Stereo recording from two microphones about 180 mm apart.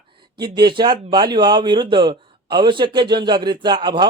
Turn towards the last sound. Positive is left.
turn(degrees=-25)  # may be behind; listen again after turning